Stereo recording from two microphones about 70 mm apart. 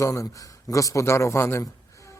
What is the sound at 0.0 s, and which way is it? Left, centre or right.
A man's voice, left.